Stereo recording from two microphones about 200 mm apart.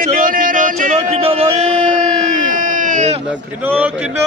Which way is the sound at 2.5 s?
40° right (ahead or behind).